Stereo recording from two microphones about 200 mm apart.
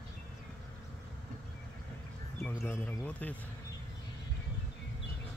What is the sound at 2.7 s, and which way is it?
Speech, 10° left (ahead or behind).